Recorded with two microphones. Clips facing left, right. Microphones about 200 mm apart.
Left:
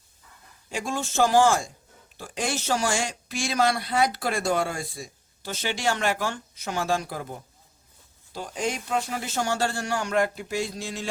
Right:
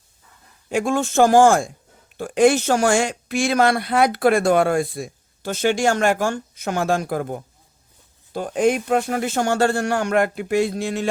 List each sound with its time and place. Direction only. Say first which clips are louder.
0.7 s speech: right 10 dB; 55° right (ahead or behind)